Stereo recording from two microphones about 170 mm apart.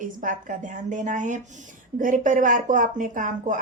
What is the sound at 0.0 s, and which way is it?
Speech, 50° right (ahead or behind).